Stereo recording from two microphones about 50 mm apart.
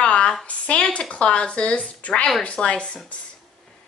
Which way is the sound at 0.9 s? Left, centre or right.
Left.